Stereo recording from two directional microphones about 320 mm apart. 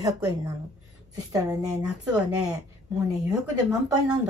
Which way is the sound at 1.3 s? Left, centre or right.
Centre.